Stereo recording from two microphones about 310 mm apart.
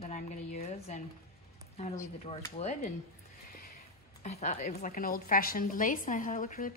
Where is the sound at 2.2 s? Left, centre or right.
Centre.